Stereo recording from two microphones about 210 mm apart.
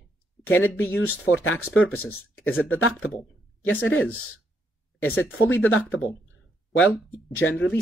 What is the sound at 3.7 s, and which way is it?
Speech, 65° left (ahead or behind).